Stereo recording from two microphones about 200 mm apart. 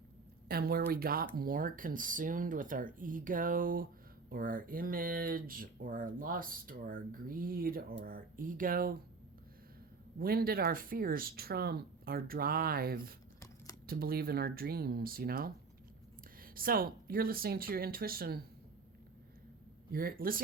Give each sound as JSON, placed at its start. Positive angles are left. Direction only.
{"t": 0.4, "sound": "speech", "side_deg": -50}
{"t": 10.2, "sound": "speech", "side_deg": -50}
{"t": 19.9, "sound": "speech", "side_deg": -50}